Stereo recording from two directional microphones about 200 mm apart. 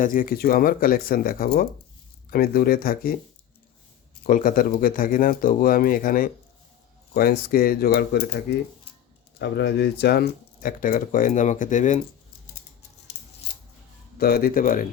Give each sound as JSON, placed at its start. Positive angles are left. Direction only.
{"t": 0.0, "sound": "speech", "side_deg": 45}
{"t": 4.3, "sound": "speech", "side_deg": 40}
{"t": 14.2, "sound": "speech", "side_deg": 50}